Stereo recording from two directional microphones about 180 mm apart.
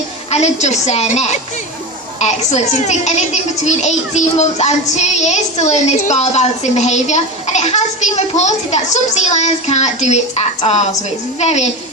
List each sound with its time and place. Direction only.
0.3 s a child's voice: 40° left (ahead or behind)